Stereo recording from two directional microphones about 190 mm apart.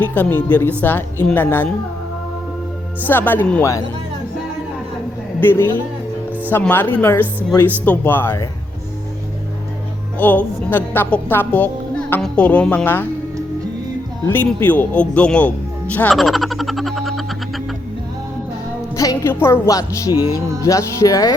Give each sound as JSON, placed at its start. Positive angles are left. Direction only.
{"t": 0.0, "sound": "a woman's voice", "side_deg": 10}
{"t": 3.1, "sound": "a woman's voice", "side_deg": 10}
{"t": 5.4, "sound": "a woman's voice", "side_deg": 10}
{"t": 10.2, "sound": "a woman's voice", "side_deg": 10}
{"t": 14.3, "sound": "speech", "side_deg": 10}
{"t": 18.9, "sound": "a woman's voice", "side_deg": 15}